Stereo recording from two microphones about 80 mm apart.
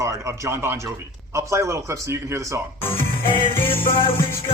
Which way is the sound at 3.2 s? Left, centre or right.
Left.